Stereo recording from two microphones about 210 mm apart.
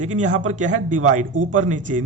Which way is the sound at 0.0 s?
35° right (ahead or behind).